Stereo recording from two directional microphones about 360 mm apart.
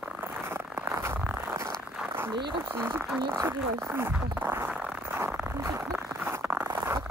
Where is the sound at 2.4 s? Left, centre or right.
Centre.